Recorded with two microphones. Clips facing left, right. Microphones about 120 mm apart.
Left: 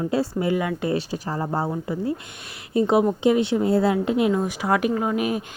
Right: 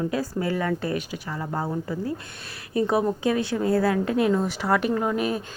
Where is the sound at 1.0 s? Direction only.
35° left (ahead or behind); by 4.3 s 20° left (ahead or behind).